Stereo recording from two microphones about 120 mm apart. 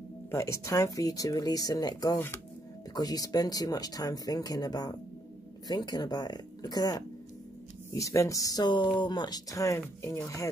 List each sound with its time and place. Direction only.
0.3 s speech: 25° left (ahead or behind)
2.1 s speech: 20° left (ahead or behind)
2.9 s speech: 30° left (ahead or behind)